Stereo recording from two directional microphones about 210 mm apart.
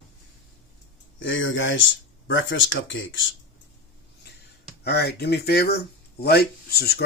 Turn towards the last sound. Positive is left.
turn(degrees=50)  # may be behind; listen again after turning